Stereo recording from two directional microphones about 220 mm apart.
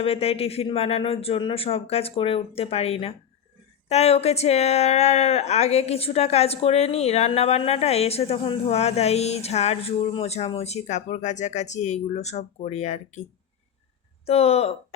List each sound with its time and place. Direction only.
0.0 s a woman's voice: 25° left (ahead or behind)
14.3 s a woman's voice: 25° left (ahead or behind)